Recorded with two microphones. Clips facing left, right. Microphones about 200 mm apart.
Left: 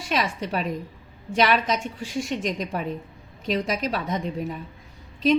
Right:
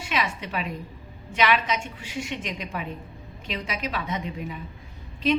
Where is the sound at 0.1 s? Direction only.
40° left (ahead or behind).